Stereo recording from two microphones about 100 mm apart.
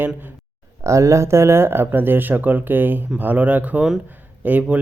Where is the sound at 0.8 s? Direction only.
30° right (ahead or behind).